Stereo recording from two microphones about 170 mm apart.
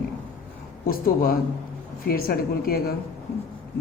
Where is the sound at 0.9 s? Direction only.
60° left (ahead or behind).